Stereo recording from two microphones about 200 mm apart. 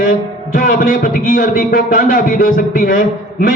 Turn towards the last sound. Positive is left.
turn(degrees=45)  # may be behind; listen again after turning